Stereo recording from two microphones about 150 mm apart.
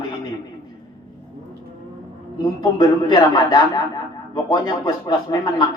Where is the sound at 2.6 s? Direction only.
25° left (ahead or behind).